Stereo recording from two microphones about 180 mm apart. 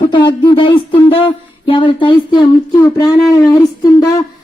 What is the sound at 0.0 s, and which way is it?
Speech, 25° left (ahead or behind).